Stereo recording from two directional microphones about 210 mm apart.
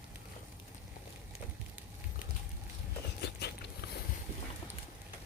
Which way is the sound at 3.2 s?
50° left (ahead or behind).